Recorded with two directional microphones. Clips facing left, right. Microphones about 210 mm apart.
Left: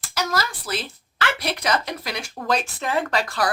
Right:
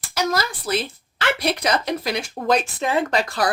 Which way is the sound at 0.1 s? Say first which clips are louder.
Right 3 dB; 20° right (ahead or behind).